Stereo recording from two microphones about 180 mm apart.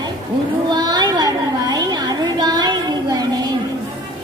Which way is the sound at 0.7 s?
25° right (ahead or behind).